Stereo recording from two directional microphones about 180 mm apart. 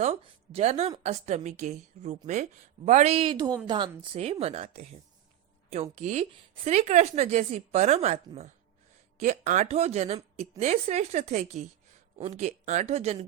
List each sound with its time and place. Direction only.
0.0 s a woman's voice: 35° right (ahead or behind)